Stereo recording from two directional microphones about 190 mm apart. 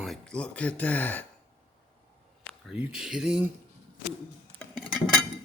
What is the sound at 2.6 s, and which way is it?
Speech, 5° right (ahead or behind).